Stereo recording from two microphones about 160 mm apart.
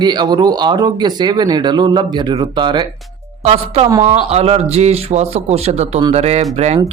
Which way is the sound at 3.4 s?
40° right (ahead or behind).